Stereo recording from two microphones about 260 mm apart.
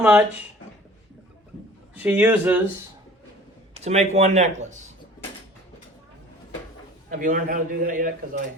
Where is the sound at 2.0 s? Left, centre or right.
Centre.